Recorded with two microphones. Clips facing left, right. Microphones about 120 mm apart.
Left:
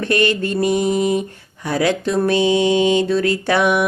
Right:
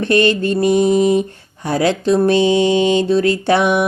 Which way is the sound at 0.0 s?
25° right (ahead or behind).